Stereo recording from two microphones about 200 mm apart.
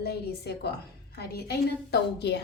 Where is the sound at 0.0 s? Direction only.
55° left (ahead or behind).